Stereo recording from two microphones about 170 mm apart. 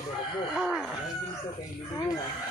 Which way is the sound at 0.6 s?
Centre (ahead or behind).